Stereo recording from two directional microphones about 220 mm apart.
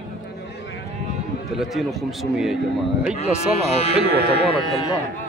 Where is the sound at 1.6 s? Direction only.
Centre (ahead or behind).